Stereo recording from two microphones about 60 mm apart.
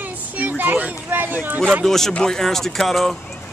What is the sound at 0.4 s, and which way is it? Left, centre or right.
A child's voice, right.